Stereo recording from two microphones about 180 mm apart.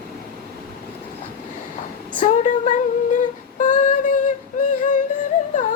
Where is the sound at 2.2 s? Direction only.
40° left (ahead or behind).